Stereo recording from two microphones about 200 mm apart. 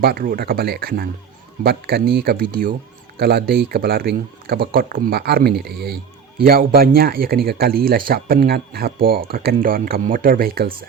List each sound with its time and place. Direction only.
0.0 s speech: 45° right (ahead or behind)